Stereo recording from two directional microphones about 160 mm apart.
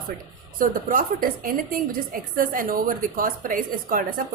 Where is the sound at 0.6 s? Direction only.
60° right (ahead or behind).